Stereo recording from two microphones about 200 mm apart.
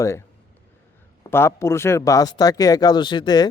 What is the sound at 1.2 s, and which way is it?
A man's voice, 10° left (ahead or behind).